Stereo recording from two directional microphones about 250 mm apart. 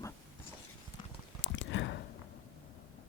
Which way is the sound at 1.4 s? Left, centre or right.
Left.